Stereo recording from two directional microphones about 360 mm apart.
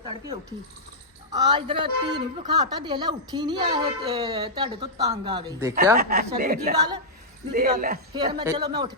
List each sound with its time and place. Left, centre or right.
1.3 s a woman's voice: centre
6.0 s speech: right
8.1 s a woman's voice: centre